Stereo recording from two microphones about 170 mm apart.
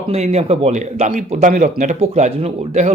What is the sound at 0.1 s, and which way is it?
A man's voice, 40° right (ahead or behind).